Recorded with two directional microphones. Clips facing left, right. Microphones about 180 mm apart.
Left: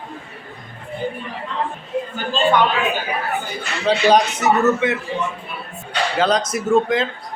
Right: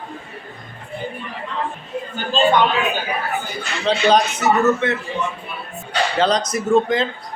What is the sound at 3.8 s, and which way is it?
A man's voice, 10° left (ahead or behind).